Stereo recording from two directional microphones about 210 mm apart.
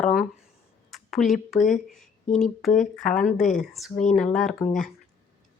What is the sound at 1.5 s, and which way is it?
Speech, 35° left (ahead or behind).